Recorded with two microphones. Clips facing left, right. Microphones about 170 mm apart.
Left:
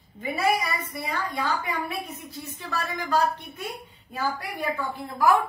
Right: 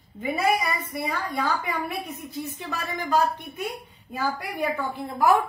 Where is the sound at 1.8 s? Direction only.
15° right (ahead or behind).